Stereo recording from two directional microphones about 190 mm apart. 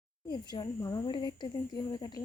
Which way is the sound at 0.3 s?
25° left (ahead or behind).